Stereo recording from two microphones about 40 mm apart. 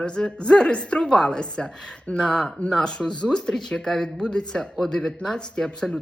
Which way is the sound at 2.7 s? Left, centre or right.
Left.